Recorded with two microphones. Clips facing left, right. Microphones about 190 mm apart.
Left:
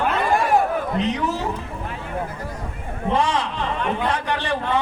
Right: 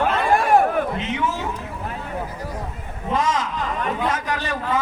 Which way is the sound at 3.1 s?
30° left (ahead or behind).